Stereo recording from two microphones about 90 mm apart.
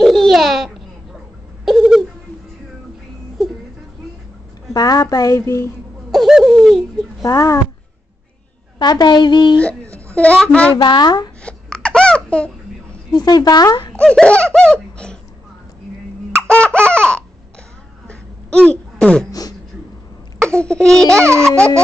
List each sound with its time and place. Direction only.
0.0 s babbling: centre (ahead or behind)
1.6 s bird: 5° right (ahead or behind)
4.7 s a woman's voice: 45° left (ahead or behind)
6.1 s bird: 5° right (ahead or behind)
7.2 s speech: 45° left (ahead or behind)
8.7 s a woman's voice: 50° left (ahead or behind)
10.1 s laughter: 15° left (ahead or behind)
10.8 s a woman's voice: 55° left (ahead or behind)
11.4 s a sound: 10° left (ahead or behind)
13.1 s speech: 50° left (ahead or behind)
13.9 s laughter: 10° left (ahead or behind)
16.3 s laughter: 10° left (ahead or behind)
18.0 s a sound: 10° left (ahead or behind)
20.4 s speech: 10° left (ahead or behind)